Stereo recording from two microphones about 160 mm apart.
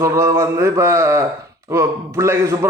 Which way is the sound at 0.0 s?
20° right (ahead or behind).